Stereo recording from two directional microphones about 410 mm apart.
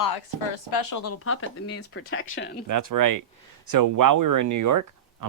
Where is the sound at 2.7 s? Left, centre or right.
Right.